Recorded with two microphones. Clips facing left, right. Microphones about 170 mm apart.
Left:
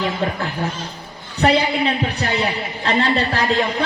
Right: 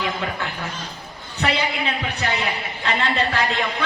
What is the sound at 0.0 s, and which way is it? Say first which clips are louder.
A man's voice: left 4 dB; 35° left (ahead or behind).